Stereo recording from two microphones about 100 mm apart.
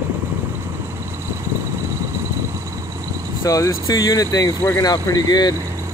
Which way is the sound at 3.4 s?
35° left (ahead or behind).